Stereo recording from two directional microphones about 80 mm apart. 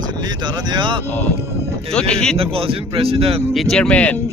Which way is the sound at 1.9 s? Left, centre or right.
Centre.